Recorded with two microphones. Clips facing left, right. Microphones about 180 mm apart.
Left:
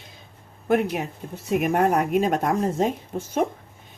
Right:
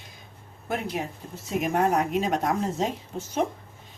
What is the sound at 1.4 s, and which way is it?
A woman's voice, 55° left (ahead or behind).